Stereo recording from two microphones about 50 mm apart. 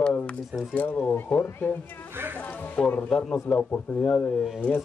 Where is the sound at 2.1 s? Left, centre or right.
Right.